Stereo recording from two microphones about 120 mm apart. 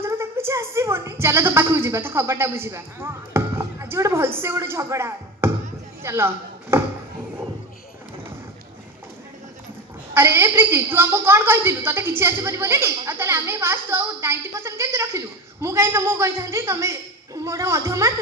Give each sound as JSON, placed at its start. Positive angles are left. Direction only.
{"t": 0.0, "sound": "a woman's voice", "side_deg": -20}
{"t": 10.2, "sound": "a woman's voice", "side_deg": -20}